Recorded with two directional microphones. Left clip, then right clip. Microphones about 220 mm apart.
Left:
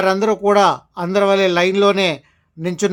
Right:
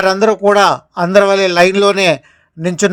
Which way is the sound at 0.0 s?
20° right (ahead or behind).